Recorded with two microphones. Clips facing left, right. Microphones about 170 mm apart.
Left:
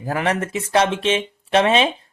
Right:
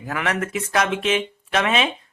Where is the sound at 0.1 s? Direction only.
35° left (ahead or behind).